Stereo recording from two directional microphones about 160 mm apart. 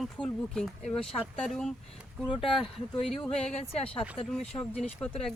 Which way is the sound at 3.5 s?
40° left (ahead or behind).